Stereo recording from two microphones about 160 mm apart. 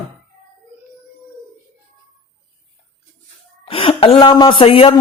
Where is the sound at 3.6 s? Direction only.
35° left (ahead or behind).